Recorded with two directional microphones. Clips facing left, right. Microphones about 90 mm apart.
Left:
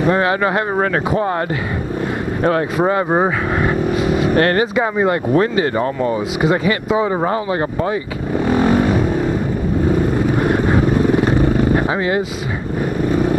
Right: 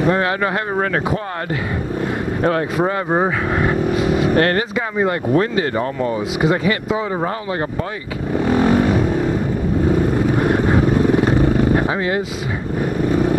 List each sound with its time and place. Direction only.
0.0 s speech: 15° left (ahead or behind)
2.4 s speech: 20° left (ahead or behind)
8.5 s vehicle: 20° left (ahead or behind)
10.4 s vehicle: 25° left (ahead or behind)